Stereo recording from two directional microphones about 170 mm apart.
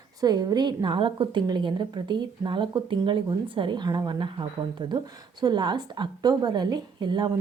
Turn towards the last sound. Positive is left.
turn(degrees=-25)  # may be behind; listen again after turning